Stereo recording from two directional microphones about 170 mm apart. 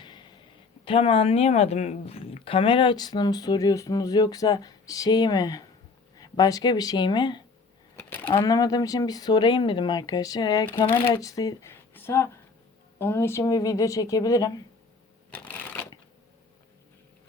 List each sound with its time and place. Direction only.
0.0 s a sound: 25° left (ahead or behind)
0.9 s speech: 35° left (ahead or behind)
7.9 s sewing machine: 10° left (ahead or behind)
8.3 s speech: 20° left (ahead or behind)
15.3 s shuffling cards: 10° left (ahead or behind)